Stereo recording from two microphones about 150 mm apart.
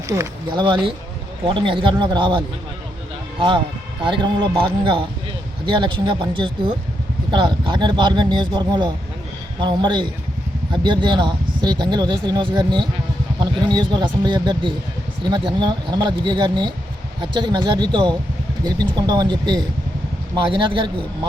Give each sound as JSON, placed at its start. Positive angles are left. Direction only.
{"t": 0.5, "sound": "speech", "side_deg": -30}
{"t": 4.0, "sound": "speech", "side_deg": -30}